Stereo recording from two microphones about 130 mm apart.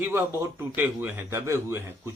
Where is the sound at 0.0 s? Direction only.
20° right (ahead or behind).